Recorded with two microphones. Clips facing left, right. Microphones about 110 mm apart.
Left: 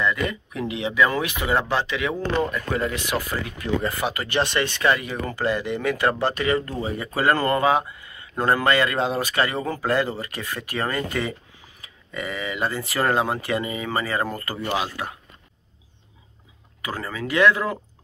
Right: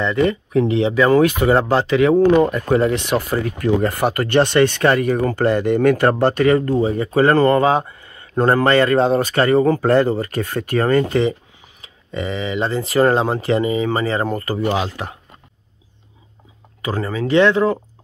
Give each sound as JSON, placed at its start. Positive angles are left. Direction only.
{"t": 0.0, "sound": "speech", "side_deg": -30}
{"t": 3.1, "sound": "speech", "side_deg": -50}
{"t": 6.8, "sound": "speech", "side_deg": -25}
{"t": 11.1, "sound": "speech", "side_deg": -25}
{"t": 16.8, "sound": "speech", "side_deg": -25}